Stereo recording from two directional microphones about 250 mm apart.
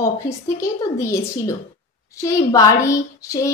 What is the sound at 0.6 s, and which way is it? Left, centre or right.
A woman's voice, centre.